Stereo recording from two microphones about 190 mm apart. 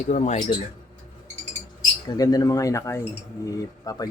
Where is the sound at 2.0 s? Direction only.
20° left (ahead or behind).